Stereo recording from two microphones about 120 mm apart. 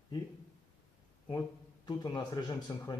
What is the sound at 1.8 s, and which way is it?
Speech, 35° left (ahead or behind).